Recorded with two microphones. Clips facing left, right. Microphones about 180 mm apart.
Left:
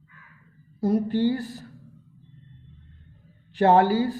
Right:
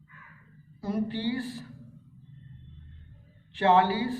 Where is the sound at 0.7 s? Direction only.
40° left (ahead or behind).